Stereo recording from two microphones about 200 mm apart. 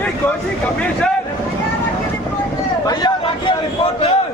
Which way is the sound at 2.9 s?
20° left (ahead or behind).